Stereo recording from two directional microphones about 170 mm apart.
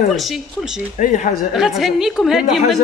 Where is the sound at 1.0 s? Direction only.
50° left (ahead or behind).